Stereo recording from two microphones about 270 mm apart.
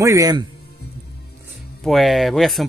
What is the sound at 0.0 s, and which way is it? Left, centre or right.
Speech, centre.